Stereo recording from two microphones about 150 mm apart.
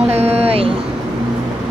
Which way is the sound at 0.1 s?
45° right (ahead or behind).